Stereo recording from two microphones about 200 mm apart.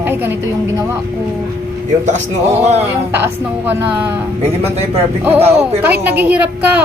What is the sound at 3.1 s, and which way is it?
A woman's voice, 10° right (ahead or behind).